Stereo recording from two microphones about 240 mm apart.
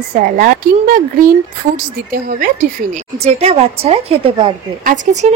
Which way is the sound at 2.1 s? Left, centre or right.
Right.